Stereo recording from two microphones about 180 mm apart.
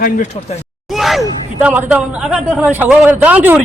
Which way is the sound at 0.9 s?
Centre (ahead or behind).